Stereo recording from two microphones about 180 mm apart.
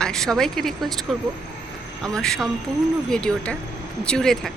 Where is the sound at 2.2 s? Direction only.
5° left (ahead or behind).